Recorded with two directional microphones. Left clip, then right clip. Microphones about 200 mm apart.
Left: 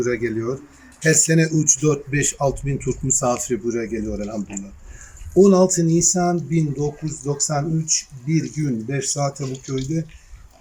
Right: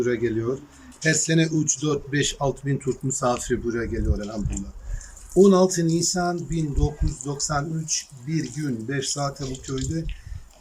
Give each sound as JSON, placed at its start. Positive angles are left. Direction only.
{"t": 0.0, "sound": "speech", "side_deg": 0}
{"t": 1.6, "sound": "speech", "side_deg": -10}
{"t": 1.9, "sound": "speech", "side_deg": 5}
{"t": 5.4, "sound": "speech", "side_deg": 10}